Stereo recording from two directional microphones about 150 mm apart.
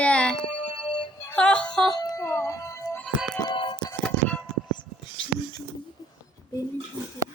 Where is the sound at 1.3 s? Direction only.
5° left (ahead or behind).